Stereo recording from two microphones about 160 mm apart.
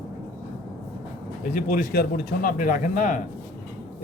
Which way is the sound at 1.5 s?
55° left (ahead or behind).